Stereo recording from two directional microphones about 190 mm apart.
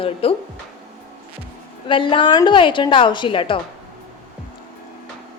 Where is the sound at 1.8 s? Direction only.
25° left (ahead or behind).